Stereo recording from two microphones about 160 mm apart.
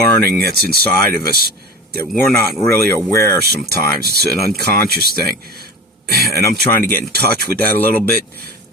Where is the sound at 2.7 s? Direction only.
75° right (ahead or behind).